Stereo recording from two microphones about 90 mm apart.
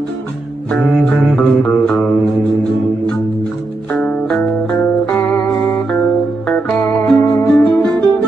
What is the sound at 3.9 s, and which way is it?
Music, 15° left (ahead or behind).